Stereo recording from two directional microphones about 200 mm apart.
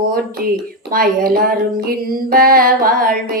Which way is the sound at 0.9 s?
45° right (ahead or behind).